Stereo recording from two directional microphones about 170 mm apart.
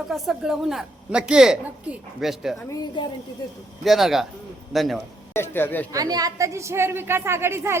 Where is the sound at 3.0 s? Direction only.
25° left (ahead or behind).